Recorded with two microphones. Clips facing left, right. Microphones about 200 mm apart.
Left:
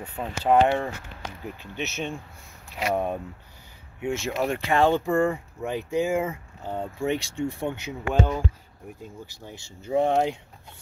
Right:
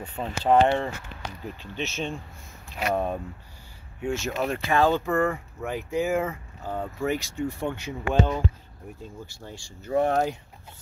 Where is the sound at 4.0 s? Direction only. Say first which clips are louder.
Left 1 dB; 20° left (ahead or behind).